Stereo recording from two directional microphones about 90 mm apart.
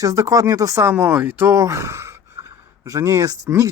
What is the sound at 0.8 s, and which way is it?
Speech, 25° right (ahead or behind).